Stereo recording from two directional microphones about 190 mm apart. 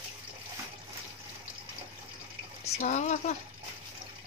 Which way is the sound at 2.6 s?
35° left (ahead or behind).